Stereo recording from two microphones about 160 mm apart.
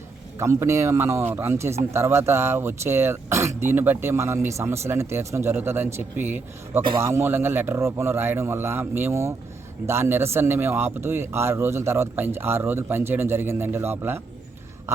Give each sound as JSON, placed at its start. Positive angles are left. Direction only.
{"t": 0.3, "sound": "speech", "side_deg": -15}